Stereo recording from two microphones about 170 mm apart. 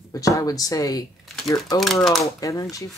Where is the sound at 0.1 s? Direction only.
20° left (ahead or behind).